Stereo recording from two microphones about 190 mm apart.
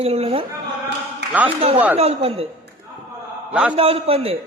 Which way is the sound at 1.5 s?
30° right (ahead or behind).